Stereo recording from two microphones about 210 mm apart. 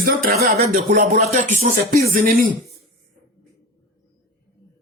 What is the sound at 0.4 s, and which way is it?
Speech, 35° right (ahead or behind).